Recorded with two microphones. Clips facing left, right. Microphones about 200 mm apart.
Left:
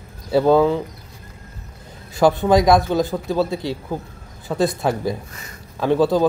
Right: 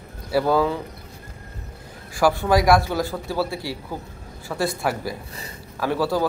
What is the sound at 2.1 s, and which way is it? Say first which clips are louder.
Speech: left 4 dB; 20° left (ahead or behind).